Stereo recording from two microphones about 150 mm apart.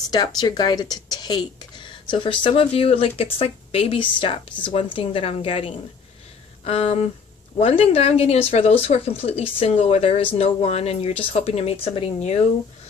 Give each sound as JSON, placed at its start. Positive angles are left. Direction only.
{"t": 0.1, "sound": "a woman's voice", "side_deg": 25}